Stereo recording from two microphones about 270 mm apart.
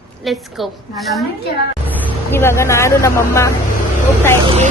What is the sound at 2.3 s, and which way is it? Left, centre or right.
Speech, centre.